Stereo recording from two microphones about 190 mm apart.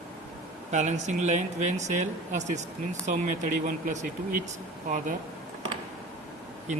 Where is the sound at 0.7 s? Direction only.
40° right (ahead or behind).